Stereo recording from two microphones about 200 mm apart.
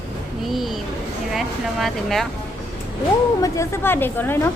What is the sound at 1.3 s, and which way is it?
Speech, centre (ahead or behind).